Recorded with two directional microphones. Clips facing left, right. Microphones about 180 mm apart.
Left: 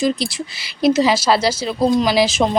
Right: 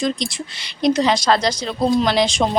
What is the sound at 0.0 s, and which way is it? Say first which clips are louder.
A woman's voice: left 3 dB; 5° left (ahead or behind).